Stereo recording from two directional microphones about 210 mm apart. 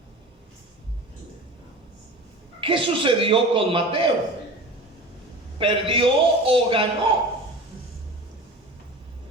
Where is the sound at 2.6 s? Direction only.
25° right (ahead or behind).